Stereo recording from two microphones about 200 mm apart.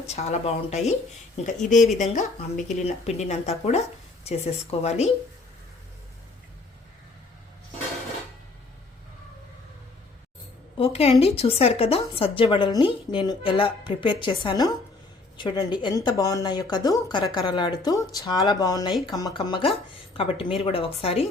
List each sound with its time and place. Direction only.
0.1 s a woman's voice: 30° left (ahead or behind)
10.8 s a woman's voice: 30° left (ahead or behind)